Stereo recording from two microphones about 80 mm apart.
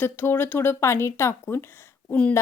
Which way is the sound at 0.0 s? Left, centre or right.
Left.